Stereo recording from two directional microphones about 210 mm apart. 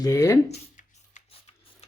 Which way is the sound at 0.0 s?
15° left (ahead or behind).